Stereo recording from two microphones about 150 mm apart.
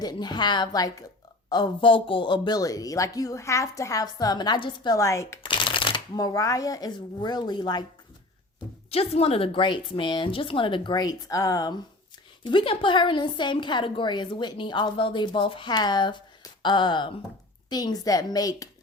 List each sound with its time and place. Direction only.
0.0 s speech: 30° left (ahead or behind)
5.4 s speech: 35° left (ahead or behind)
8.9 s a woman's voice: 40° left (ahead or behind); by 18.7 s 25° left (ahead or behind)